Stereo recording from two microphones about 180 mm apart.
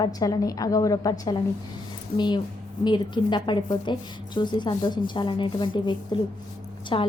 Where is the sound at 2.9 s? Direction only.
25° left (ahead or behind).